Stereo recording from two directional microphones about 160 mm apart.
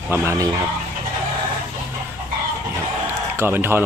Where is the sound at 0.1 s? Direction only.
15° right (ahead or behind).